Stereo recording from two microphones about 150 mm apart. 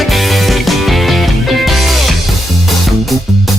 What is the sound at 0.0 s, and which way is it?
Music, centre (ahead or behind).